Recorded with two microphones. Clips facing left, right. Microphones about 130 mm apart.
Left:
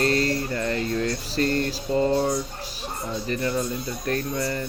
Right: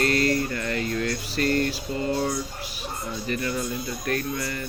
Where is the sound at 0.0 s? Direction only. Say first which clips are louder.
Even; 30° left (ahead or behind).